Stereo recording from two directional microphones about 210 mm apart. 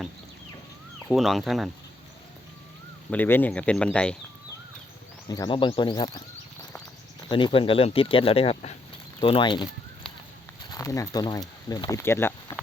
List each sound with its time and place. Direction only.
1.1 s speech: centre (ahead or behind)
3.1 s speech: 10° left (ahead or behind)
5.3 s speech: 20° left (ahead or behind)
7.3 s speech: 25° left (ahead or behind)
10.7 s speech: 15° left (ahead or behind)